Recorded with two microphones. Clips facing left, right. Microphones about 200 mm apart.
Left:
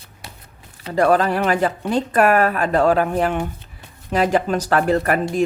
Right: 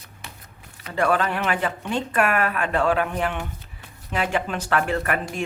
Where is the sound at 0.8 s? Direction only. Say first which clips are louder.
Left 6 dB; 40° left (ahead or behind).